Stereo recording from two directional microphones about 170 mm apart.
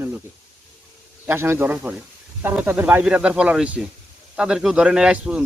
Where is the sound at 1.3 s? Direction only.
15° right (ahead or behind).